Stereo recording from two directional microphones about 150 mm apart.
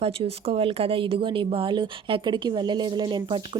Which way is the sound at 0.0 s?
40° right (ahead or behind).